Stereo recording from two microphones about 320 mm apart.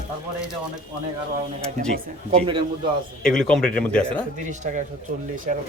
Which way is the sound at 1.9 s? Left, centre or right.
Centre.